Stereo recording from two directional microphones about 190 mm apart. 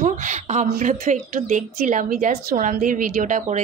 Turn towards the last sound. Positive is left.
turn(degrees=-40)  # may be behind; listen again after turning